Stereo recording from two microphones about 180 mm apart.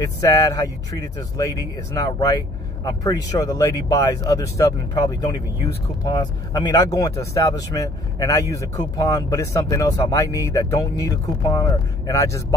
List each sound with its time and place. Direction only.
0.0 s speech: 20° left (ahead or behind)